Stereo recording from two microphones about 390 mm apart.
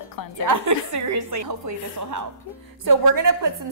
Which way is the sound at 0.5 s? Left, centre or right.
Right.